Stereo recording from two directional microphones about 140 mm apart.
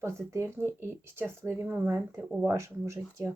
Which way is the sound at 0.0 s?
20° right (ahead or behind).